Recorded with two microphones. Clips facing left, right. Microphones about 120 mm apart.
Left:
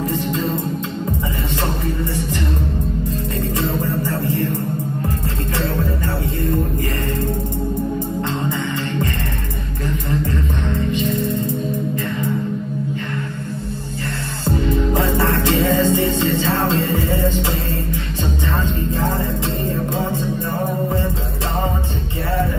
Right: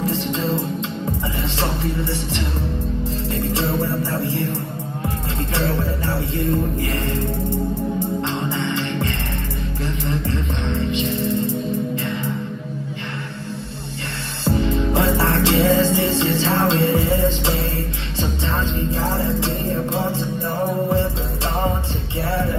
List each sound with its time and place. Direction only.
0.0 s music: 25° right (ahead or behind)
3.3 s music: 25° right (ahead or behind)
5.6 s music: 25° right (ahead or behind)
8.5 s music: 25° right (ahead or behind)
10.3 s music: 25° right (ahead or behind)
14.4 s music: 25° right (ahead or behind)
18.9 s music: 25° right (ahead or behind)